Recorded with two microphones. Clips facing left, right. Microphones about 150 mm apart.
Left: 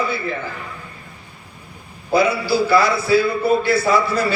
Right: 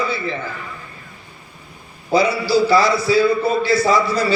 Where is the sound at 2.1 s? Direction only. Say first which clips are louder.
Right 1 dB; 55° left (ahead or behind).